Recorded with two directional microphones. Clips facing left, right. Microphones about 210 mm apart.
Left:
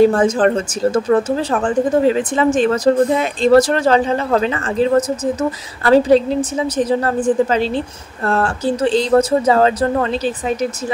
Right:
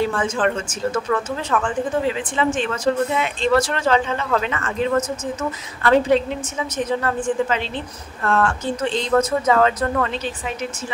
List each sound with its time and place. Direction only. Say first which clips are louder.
0.0 s speech: left 8 dB; 40° left (ahead or behind)